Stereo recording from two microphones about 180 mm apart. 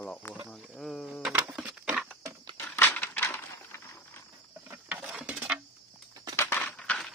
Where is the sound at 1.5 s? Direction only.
5° right (ahead or behind).